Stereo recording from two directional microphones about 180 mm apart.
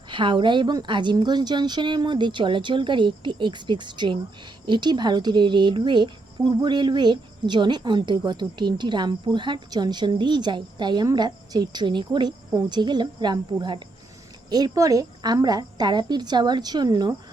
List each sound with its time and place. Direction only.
0.1 s a woman's voice: 25° right (ahead or behind)